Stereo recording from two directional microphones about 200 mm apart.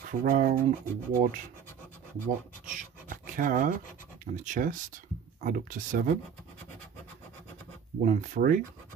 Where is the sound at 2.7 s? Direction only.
45° right (ahead or behind).